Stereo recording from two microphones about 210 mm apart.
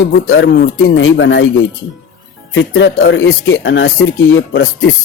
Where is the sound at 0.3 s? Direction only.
60° left (ahead or behind).